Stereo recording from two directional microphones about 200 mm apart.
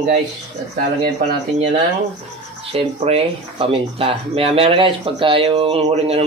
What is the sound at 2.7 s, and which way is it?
Speech, 30° right (ahead or behind).